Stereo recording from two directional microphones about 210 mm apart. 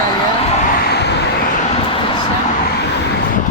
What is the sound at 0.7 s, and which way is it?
Vehicle, 50° left (ahead or behind).